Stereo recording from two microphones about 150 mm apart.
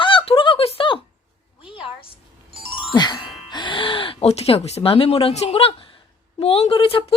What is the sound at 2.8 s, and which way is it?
A woman's voice, 30° left (ahead or behind).